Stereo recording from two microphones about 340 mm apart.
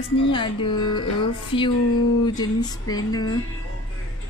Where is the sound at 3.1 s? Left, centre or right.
Centre.